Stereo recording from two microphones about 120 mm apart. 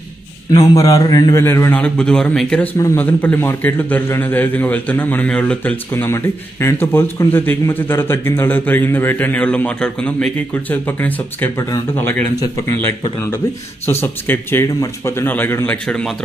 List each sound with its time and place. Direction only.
0.7 s a man's voice: 30° left (ahead or behind)
1.4 s a man's voice: 20° left (ahead or behind)
14.0 s a man's voice: 15° left (ahead or behind)